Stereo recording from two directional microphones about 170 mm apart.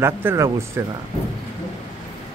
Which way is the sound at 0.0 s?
15° right (ahead or behind).